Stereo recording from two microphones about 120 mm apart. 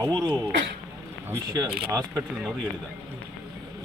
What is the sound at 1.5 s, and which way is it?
Speech, 35° right (ahead or behind).